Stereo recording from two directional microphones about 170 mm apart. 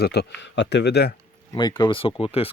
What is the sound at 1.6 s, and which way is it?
Speech, 25° left (ahead or behind).